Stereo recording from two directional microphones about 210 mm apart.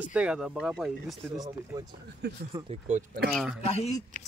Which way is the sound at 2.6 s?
35° right (ahead or behind).